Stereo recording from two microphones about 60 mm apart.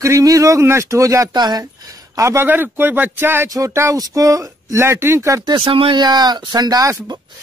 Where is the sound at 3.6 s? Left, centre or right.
Right.